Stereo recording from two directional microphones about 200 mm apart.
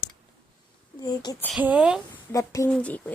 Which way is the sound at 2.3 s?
15° left (ahead or behind).